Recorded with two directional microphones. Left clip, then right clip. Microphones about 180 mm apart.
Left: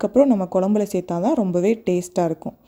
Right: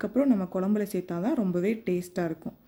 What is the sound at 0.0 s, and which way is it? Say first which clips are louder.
Speech: left 10 dB; 30° left (ahead or behind).